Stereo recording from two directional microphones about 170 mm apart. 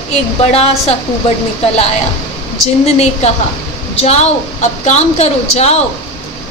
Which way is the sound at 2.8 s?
40° left (ahead or behind).